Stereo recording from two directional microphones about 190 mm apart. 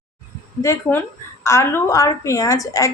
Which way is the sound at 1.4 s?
15° left (ahead or behind).